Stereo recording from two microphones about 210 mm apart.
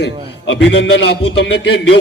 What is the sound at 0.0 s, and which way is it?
A man's voice, 60° left (ahead or behind).